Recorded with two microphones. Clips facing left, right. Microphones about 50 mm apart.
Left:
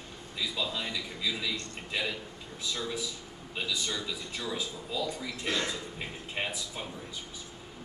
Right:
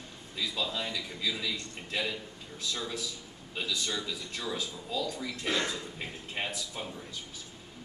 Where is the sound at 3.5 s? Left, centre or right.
Centre.